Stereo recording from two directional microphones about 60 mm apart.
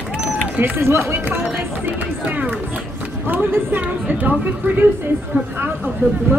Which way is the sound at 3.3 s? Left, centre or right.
Right.